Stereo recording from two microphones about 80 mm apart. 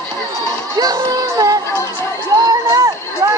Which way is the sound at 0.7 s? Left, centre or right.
Right.